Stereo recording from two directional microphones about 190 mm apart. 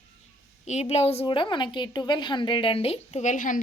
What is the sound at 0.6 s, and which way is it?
A woman's voice, 35° left (ahead or behind).